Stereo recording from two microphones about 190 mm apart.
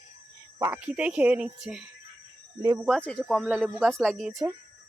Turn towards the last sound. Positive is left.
turn(degrees=0)  # may be behind; listen again after turning